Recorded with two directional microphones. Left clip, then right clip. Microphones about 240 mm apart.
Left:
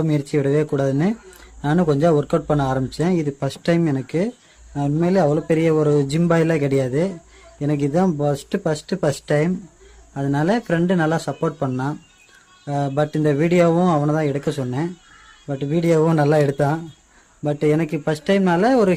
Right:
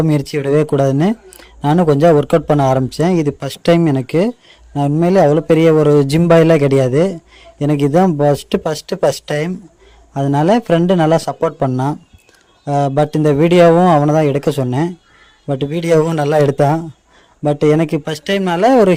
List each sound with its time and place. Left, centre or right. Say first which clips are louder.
0.0 s speech: right 4 dB; right